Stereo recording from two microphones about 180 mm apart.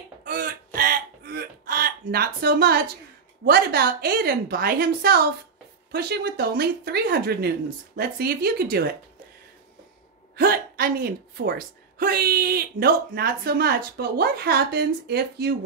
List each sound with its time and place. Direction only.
0.2 s music: 50° right (ahead or behind)
0.7 s a sound: 55° right (ahead or behind)
3.4 s a woman's voice: 60° right (ahead or behind)
10.3 s a woman's voice: 55° right (ahead or behind)